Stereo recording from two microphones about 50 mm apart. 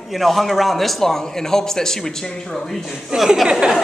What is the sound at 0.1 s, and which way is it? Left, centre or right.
A man's voice, centre.